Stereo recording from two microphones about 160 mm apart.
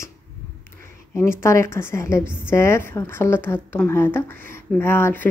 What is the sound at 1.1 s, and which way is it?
Speech, 15° left (ahead or behind).